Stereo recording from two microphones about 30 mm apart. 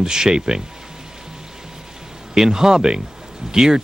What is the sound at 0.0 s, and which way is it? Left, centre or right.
Speech, right.